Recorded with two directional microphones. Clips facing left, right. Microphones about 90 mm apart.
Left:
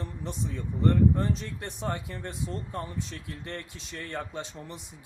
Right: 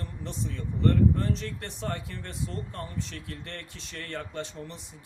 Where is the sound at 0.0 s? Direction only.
15° left (ahead or behind).